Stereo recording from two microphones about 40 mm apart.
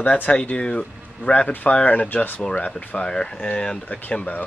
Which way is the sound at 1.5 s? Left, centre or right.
Left.